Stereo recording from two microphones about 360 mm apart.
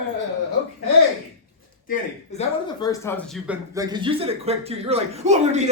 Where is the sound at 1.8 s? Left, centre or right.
Centre.